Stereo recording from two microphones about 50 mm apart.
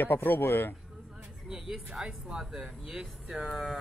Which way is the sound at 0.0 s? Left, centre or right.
Left.